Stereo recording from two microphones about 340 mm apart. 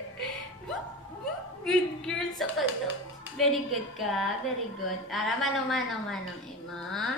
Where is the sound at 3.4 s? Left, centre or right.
Centre.